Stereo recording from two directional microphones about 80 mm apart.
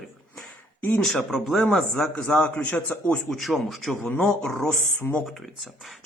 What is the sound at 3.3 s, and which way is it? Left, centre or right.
A man's voice, centre.